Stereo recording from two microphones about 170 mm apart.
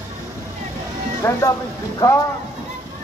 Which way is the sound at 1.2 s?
15° left (ahead or behind).